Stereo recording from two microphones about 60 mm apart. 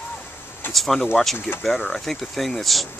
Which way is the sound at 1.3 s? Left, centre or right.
Left.